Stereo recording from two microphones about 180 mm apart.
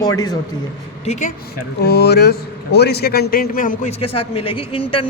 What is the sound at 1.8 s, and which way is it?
A man's voice, 65° left (ahead or behind).